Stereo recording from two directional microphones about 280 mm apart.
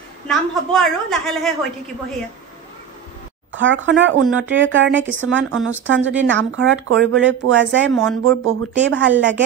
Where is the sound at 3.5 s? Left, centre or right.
Right.